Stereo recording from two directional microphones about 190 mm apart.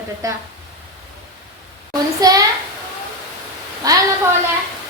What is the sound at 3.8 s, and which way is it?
Speech, 20° right (ahead or behind).